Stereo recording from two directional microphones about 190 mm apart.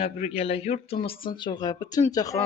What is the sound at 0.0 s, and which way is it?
Speech, 30° left (ahead or behind).